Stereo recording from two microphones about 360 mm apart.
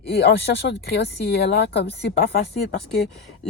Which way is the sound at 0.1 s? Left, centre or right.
Left.